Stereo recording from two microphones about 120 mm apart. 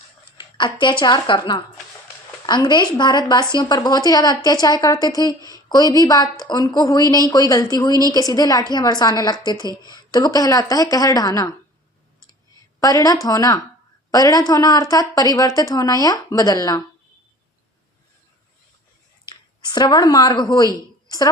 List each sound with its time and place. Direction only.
0.3 s speech: 40° left (ahead or behind)
2.6 s a woman's voice: 35° left (ahead or behind)
12.8 s a woman's voice: 30° left (ahead or behind)
19.3 s speech: 40° left (ahead or behind)